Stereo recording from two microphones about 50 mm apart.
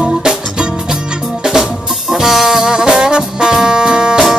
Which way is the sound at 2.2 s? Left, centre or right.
Centre.